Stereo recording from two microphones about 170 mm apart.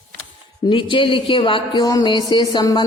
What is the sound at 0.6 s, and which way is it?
Speech, 30° left (ahead or behind).